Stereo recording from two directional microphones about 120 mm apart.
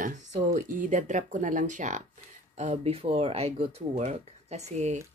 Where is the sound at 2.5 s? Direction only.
75° right (ahead or behind).